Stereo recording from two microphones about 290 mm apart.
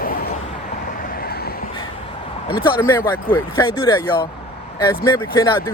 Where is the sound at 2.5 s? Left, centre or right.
Centre.